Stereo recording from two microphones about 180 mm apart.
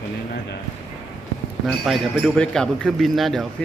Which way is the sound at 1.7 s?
Centre (ahead or behind).